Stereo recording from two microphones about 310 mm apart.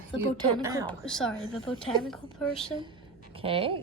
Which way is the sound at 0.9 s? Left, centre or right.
Centre.